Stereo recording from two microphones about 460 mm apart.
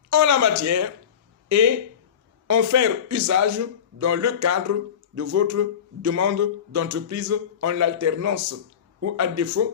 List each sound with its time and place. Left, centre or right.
0.1 s a man's voice: right